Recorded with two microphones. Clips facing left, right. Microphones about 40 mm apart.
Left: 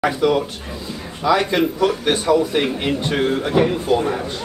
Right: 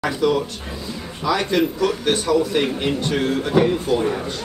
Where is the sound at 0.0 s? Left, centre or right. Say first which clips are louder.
Left 2 dB; centre.